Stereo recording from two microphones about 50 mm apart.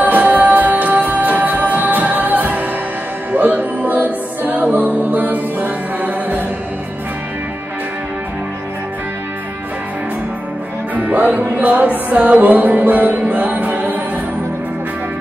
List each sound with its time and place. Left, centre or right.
0.0 s music: right
11.0 s music: right